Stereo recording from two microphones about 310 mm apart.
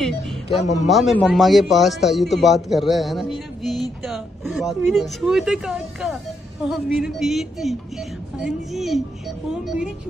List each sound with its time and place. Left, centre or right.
0.5 s speech: left
0.8 s a man's voice: centre